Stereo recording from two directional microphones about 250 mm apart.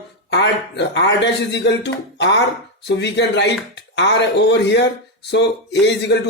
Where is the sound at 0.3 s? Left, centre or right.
Left.